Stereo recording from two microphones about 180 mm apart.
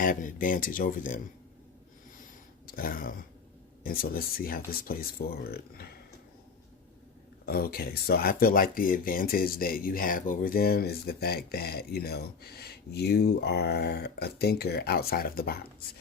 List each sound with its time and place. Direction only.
0.0 s speech: 50° left (ahead or behind)
2.6 s speech: 50° left (ahead or behind)
7.4 s speech: 60° left (ahead or behind)